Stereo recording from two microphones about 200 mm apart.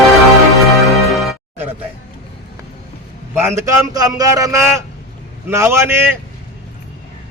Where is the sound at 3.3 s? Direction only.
15° right (ahead or behind).